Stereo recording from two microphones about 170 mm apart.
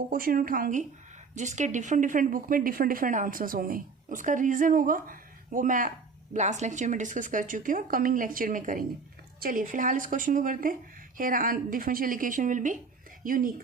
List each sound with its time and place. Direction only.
0.1 s speech: 55° right (ahead or behind)